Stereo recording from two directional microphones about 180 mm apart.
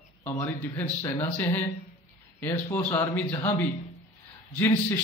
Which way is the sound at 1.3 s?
10° left (ahead or behind).